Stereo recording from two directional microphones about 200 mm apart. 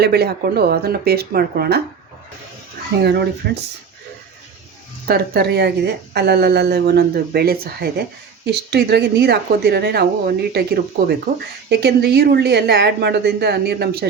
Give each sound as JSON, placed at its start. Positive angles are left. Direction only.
{"t": 0.0, "sound": "a woman's voice", "side_deg": -55}
{"t": 3.0, "sound": "speech", "side_deg": -55}
{"t": 5.0, "sound": "a woman's voice", "side_deg": -50}